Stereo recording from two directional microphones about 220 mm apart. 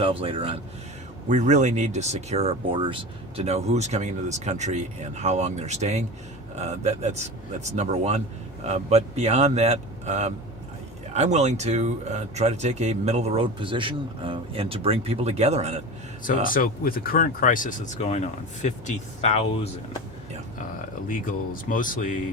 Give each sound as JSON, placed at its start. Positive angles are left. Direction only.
{"t": 0.0, "sound": "speech", "side_deg": -25}
{"t": 16.2, "sound": "speech", "side_deg": 40}
{"t": 21.1, "sound": "speech", "side_deg": 40}